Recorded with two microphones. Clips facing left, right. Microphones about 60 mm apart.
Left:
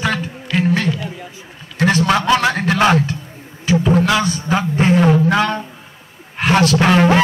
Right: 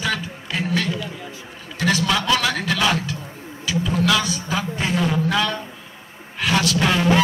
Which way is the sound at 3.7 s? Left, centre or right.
Left.